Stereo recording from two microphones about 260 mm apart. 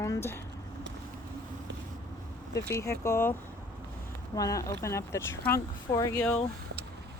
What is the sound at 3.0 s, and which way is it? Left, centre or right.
Speech, centre.